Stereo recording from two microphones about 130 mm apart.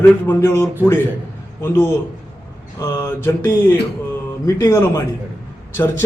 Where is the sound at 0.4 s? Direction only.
25° left (ahead or behind).